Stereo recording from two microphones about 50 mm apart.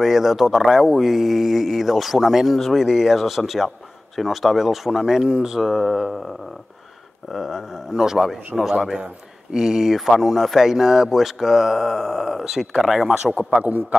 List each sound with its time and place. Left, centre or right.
0.0 s speech: centre
5.6 s speech: centre
7.3 s speech: centre
13.1 s a man's voice: right